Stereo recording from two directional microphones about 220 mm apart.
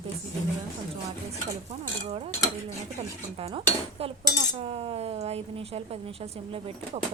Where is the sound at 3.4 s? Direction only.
25° right (ahead or behind).